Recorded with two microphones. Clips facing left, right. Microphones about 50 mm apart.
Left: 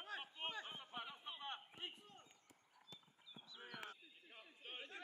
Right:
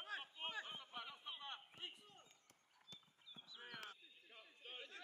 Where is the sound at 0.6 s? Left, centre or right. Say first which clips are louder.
Left 1 dB; left.